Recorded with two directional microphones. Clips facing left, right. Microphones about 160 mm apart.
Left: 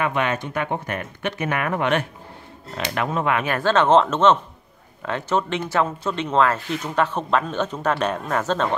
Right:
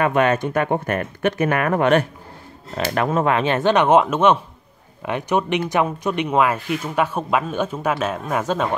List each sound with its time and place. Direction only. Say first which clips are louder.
0.0 s speech: right 5 dB; 45° right (ahead or behind)
3.3 s speech: even; 25° right (ahead or behind)